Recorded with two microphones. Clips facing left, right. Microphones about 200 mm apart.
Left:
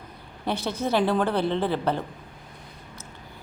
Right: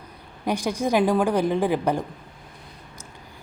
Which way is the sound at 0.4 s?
10° right (ahead or behind).